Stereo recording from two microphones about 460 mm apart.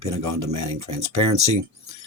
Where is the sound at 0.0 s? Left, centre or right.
Right.